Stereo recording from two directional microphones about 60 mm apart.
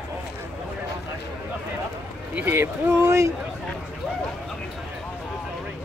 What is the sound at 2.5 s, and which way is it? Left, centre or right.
Speech, right.